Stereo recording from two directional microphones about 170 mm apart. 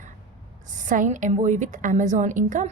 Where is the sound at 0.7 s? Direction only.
50° right (ahead or behind).